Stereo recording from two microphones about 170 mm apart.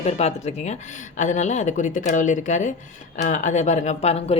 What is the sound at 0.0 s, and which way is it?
Speech, 40° left (ahead or behind).